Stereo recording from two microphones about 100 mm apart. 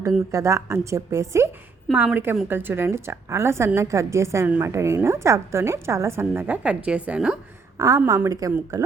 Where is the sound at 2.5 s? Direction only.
20° right (ahead or behind).